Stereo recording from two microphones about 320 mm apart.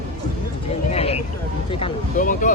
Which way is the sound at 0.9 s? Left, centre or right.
Centre.